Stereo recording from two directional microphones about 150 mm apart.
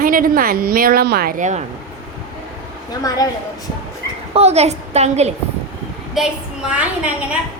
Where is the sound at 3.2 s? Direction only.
25° left (ahead or behind).